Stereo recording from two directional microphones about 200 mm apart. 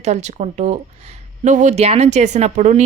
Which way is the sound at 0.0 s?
35° right (ahead or behind).